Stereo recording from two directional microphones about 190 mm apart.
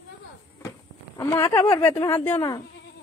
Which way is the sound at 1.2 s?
15° left (ahead or behind).